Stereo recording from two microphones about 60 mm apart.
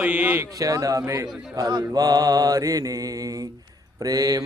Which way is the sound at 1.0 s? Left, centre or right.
Right.